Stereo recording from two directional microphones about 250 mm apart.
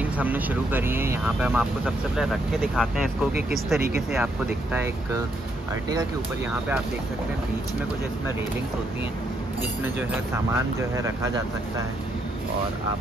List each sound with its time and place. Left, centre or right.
0.0 s speech: centre
9.6 s speech: centre